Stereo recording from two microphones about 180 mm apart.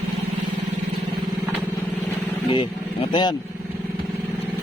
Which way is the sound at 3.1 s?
25° left (ahead or behind).